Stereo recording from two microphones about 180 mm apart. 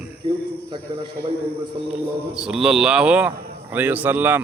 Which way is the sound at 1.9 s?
5° right (ahead or behind).